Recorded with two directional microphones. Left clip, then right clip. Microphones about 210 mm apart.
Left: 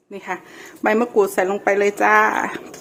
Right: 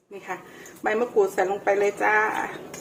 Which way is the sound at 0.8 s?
50° left (ahead or behind).